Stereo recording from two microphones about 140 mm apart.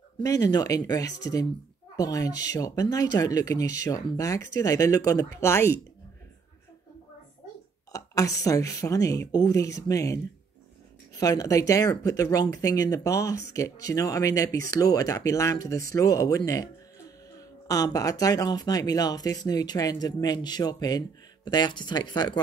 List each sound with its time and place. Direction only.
0.2 s speech: 25° left (ahead or behind)
7.9 s speech: 25° left (ahead or behind)